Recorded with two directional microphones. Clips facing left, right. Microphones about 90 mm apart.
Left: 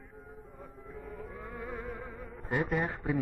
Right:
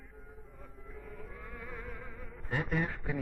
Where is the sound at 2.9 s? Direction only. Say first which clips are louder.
Left 5 dB; 40° left (ahead or behind).